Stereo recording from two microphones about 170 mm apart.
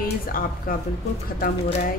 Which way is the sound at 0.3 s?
55° left (ahead or behind).